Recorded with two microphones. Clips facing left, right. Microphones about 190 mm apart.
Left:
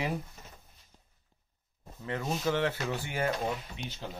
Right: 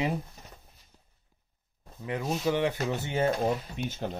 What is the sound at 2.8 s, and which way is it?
Speech, 20° right (ahead or behind).